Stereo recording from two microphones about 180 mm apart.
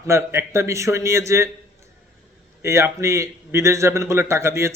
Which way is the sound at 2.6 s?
15° right (ahead or behind).